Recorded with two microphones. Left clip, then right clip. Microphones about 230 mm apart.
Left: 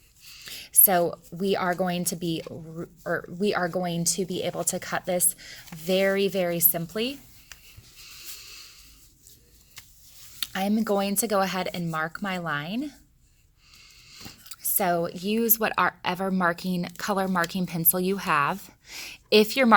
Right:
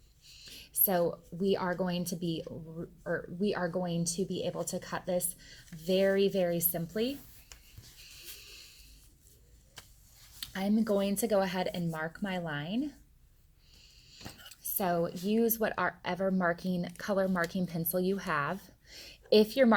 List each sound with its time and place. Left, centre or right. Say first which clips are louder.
0.3 s a woman's voice: left 11 dB; left
8.0 s a sound: left 7 dB; left
10.4 s a woman's voice: left 6 dB; left